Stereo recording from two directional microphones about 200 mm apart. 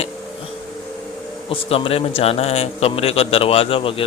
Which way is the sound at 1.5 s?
25° left (ahead or behind).